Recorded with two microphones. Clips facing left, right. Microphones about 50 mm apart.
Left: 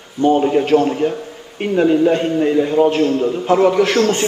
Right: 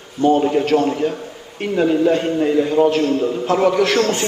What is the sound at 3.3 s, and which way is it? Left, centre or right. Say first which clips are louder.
Speech: left 3 dB; centre.